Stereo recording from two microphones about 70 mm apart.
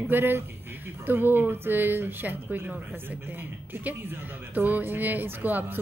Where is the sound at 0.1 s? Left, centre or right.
Right.